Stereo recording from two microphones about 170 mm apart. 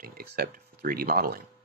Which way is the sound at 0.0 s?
60° right (ahead or behind).